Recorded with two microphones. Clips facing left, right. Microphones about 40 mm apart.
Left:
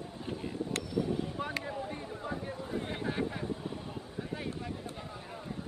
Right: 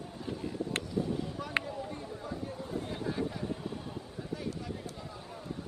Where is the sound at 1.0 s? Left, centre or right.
Left.